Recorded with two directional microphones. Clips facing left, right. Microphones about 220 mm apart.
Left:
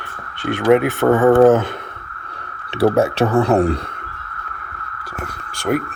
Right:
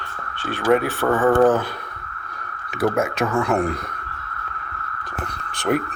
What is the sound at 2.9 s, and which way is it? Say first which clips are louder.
Speech: left 6 dB; 35° left (ahead or behind).